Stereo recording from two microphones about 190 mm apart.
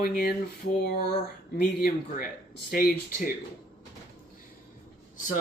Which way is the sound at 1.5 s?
50° left (ahead or behind).